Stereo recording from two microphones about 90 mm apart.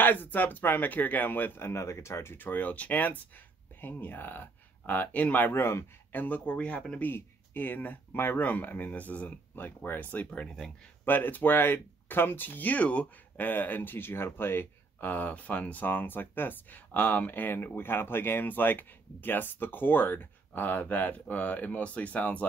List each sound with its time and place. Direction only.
0.0 s speech: 20° left (ahead or behind)